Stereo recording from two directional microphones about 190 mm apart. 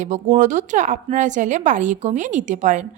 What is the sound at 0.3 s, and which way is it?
Speech, 40° right (ahead or behind).